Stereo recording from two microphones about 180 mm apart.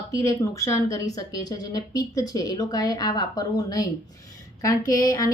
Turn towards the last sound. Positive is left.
turn(degrees=20)  # may be behind; listen again after turning